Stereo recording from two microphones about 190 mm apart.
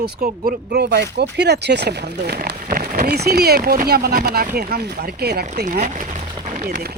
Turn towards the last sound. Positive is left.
turn(degrees=-55)  # may be behind; listen again after turning